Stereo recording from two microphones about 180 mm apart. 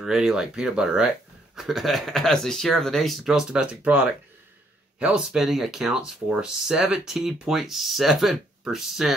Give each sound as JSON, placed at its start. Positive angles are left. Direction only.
{"t": 0.0, "sound": "speech", "side_deg": 0}